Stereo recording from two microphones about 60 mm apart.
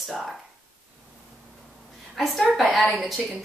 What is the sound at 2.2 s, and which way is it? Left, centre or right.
Speech, centre.